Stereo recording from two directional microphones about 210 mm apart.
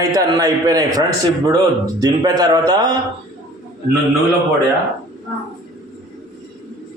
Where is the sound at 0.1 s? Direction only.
15° right (ahead or behind).